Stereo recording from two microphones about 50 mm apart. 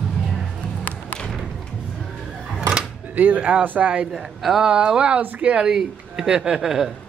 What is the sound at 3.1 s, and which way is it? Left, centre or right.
Speech, right.